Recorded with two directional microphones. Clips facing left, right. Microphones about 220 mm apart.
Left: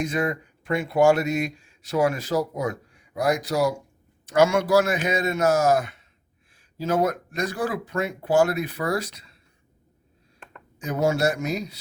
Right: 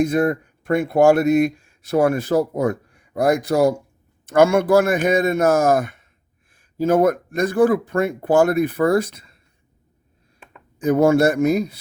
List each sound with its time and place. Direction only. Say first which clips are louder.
0.0 s speech: right 7 dB; 55° right (ahead or behind)
10.8 s speech: right 8 dB; 55° right (ahead or behind)